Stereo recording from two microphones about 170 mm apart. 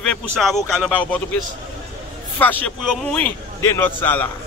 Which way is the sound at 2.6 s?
5° left (ahead or behind).